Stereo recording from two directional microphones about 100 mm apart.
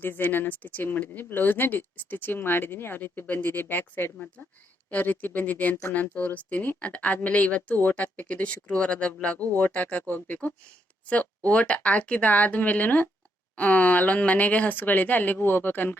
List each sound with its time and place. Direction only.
0.0 s speech: 20° left (ahead or behind)